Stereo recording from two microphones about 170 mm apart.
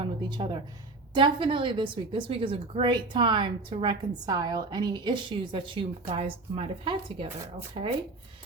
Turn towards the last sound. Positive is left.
turn(degrees=-35)  # may be behind; listen again after turning